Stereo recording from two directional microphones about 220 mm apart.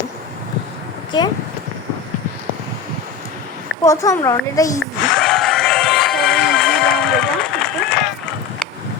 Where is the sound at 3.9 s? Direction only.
15° left (ahead or behind).